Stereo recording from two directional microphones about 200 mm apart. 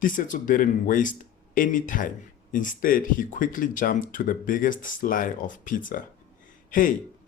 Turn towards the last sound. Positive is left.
turn(degrees=40)  # may be behind; listen again after turning